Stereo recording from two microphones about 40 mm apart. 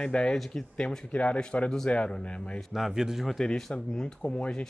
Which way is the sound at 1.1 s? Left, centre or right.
Left.